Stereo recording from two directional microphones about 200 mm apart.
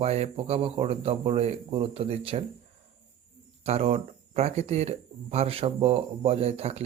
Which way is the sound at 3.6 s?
30° right (ahead or behind).